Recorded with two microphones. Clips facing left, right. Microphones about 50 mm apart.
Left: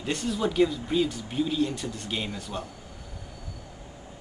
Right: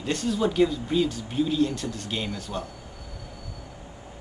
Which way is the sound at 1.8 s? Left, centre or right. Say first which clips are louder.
Right 2 dB; centre.